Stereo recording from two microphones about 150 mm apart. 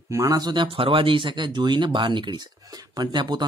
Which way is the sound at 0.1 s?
25° right (ahead or behind).